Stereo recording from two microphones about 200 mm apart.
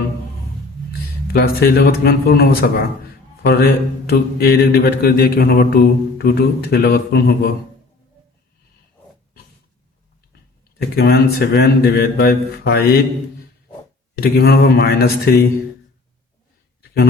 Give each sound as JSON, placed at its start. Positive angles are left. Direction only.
{"t": 1.3, "sound": "mantra", "side_deg": 50}
{"t": 3.4, "sound": "a man's voice", "side_deg": 50}
{"t": 4.1, "sound": "mantra", "side_deg": 50}
{"t": 10.9, "sound": "mantra", "side_deg": 50}
{"t": 14.2, "sound": "mantra", "side_deg": 50}